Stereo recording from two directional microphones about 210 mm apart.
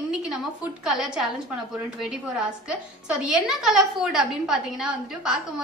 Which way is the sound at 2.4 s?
5° right (ahead or behind).